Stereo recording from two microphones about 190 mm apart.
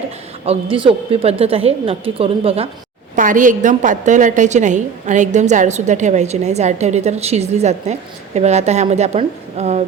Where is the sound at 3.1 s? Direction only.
45° right (ahead or behind).